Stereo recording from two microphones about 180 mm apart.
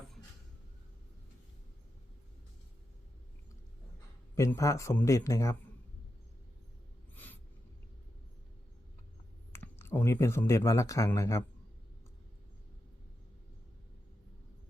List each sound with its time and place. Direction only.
4.4 s a man's voice: 15° left (ahead or behind)
9.5 s speech: 15° left (ahead or behind)